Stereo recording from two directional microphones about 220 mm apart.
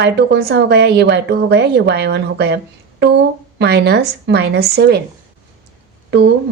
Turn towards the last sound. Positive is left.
turn(degrees=-55)  # may be behind; listen again after turning